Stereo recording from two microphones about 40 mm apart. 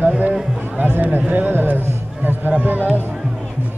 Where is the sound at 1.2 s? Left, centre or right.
Right.